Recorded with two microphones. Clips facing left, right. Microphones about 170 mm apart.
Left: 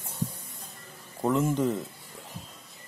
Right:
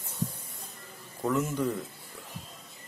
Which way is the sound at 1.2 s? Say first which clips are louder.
Left 3 dB; 25° left (ahead or behind).